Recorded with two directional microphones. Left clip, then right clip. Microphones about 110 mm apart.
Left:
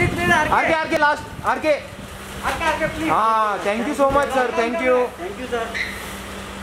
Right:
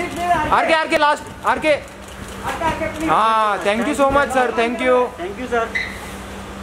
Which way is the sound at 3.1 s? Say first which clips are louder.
Right 3 dB; 10° right (ahead or behind).